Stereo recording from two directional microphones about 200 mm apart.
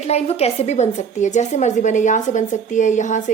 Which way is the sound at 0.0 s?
30° left (ahead or behind).